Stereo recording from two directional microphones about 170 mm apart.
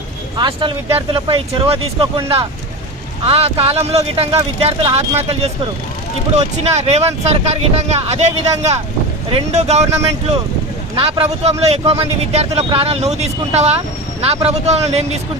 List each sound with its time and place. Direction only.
0.3 s speech: 30° right (ahead or behind)
3.2 s speech: 35° right (ahead or behind)
10.9 s speech: 35° right (ahead or behind)